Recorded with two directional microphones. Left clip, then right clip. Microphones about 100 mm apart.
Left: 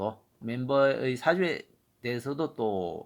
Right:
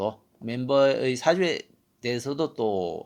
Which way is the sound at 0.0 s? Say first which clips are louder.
Right 4 dB; 35° right (ahead or behind).